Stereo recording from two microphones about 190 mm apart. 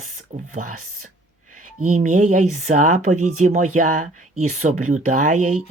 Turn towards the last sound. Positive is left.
turn(degrees=-40)  # may be behind; listen again after turning